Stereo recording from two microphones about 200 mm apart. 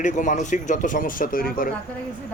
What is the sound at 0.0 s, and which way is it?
Speech, 40° left (ahead or behind).